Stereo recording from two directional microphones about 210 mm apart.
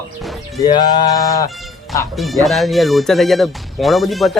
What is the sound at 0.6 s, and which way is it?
Speech, 20° left (ahead or behind).